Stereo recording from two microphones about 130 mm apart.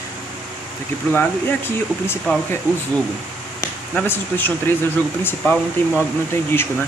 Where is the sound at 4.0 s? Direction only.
15° left (ahead or behind).